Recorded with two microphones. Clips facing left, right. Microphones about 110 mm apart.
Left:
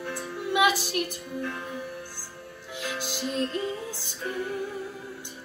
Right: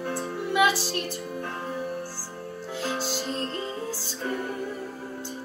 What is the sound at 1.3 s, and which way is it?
Speech, 45° right (ahead or behind).